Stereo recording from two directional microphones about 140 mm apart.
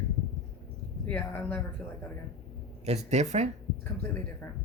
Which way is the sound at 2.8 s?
50° right (ahead or behind).